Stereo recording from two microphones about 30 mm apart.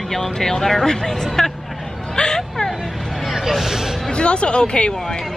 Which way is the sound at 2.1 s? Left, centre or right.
Left.